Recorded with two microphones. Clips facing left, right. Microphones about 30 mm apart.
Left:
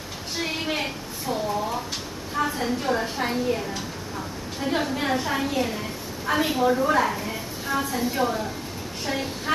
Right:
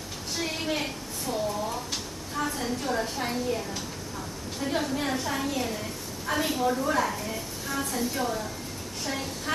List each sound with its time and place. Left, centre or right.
0.4 s a sound: centre
2.3 s a woman's voice: centre
4.6 s a woman's voice: centre